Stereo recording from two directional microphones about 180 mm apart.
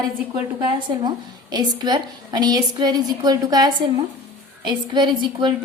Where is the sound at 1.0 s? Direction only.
25° right (ahead or behind).